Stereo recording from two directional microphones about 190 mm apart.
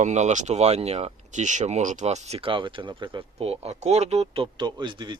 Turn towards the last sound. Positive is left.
turn(degrees=-25)  # may be behind; listen again after turning